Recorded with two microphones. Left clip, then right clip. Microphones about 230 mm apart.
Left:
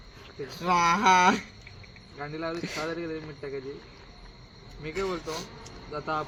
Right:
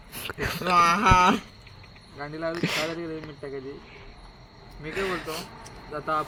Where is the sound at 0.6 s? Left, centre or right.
Centre.